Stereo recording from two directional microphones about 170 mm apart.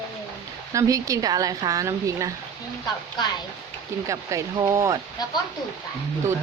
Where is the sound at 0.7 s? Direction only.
20° right (ahead or behind).